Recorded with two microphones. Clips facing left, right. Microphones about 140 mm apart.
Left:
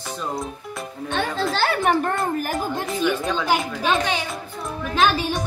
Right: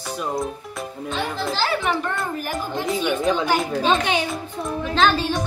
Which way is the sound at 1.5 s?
55° left (ahead or behind).